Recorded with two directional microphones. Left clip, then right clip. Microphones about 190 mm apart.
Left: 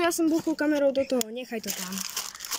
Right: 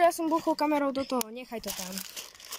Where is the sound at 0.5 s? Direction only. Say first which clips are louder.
Left 4 dB; 10° right (ahead or behind).